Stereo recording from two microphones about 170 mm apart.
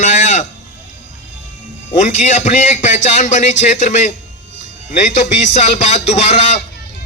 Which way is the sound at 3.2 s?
45° left (ahead or behind).